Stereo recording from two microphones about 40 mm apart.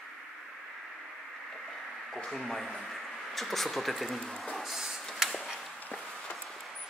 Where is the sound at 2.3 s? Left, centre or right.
Centre.